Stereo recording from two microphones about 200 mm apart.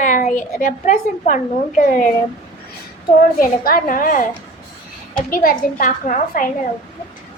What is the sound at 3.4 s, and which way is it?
Speech, 45° left (ahead or behind).